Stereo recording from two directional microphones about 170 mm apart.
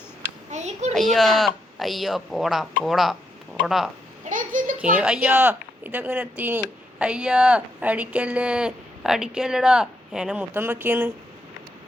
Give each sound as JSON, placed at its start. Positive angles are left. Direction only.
{"t": 0.5, "sound": "a child's voice", "side_deg": -40}
{"t": 0.9, "sound": "speech", "side_deg": 0}
{"t": 4.3, "sound": "a sound", "side_deg": -50}
{"t": 4.9, "sound": "speech", "side_deg": -5}